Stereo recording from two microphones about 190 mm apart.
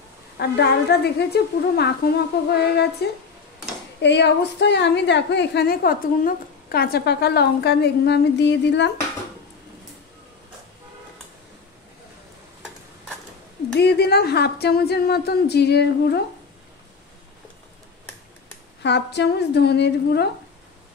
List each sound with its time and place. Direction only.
0.4 s a woman's voice: 60° left (ahead or behind)
13.7 s a woman's voice: 60° left (ahead or behind)
18.8 s a woman's voice: 65° left (ahead or behind)